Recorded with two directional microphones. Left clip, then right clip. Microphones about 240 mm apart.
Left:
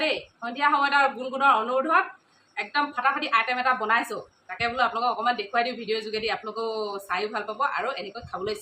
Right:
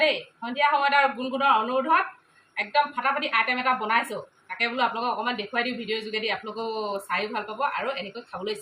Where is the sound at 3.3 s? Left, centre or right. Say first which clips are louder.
Even; centre.